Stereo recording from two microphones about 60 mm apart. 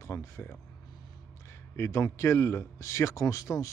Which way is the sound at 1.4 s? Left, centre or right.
Left.